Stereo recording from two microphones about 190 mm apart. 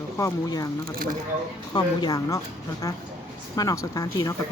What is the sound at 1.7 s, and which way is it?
A woman's voice, 20° left (ahead or behind).